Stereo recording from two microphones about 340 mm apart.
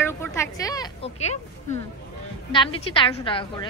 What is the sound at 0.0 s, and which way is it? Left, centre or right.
Speech, centre.